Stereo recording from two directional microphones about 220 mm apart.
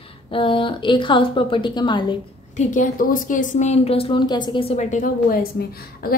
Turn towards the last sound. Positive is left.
turn(degrees=45)  # may be behind; listen again after turning